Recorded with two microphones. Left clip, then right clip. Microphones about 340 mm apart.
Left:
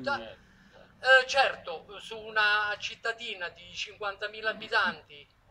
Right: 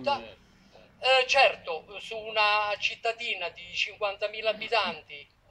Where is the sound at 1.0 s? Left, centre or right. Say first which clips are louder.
Even; centre.